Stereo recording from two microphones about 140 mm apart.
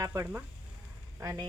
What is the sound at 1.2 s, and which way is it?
Speech, 25° right (ahead or behind).